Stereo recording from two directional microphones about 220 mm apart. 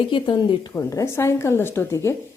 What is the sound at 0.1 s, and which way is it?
A woman's voice, 20° left (ahead or behind).